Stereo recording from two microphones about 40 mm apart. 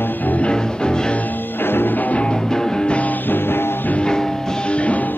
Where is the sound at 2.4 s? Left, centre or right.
Centre.